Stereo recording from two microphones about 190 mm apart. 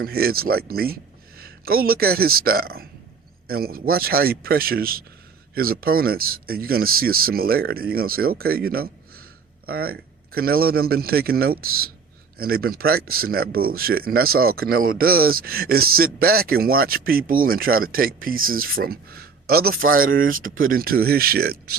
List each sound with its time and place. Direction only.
0.0 s a man's voice: 55° right (ahead or behind)